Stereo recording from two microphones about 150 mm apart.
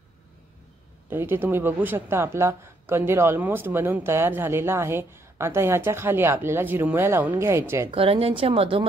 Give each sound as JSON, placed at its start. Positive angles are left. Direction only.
{"t": 1.1, "sound": "a man's voice", "side_deg": -15}
{"t": 7.9, "sound": "speech", "side_deg": -40}